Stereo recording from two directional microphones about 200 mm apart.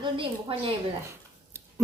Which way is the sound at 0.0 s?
25° right (ahead or behind).